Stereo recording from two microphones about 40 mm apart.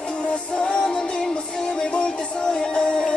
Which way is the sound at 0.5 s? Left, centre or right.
Left.